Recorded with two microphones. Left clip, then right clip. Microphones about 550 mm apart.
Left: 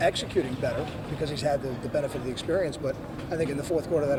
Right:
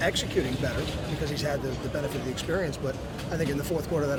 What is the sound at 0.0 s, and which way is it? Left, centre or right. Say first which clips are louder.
Speech: left 1 dB; left.